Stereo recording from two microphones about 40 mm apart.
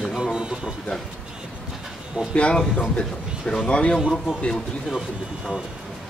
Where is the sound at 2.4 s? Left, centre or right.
Left.